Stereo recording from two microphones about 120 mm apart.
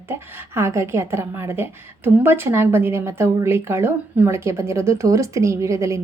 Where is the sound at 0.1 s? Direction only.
20° right (ahead or behind).